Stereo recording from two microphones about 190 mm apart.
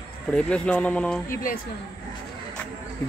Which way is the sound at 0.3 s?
5° left (ahead or behind).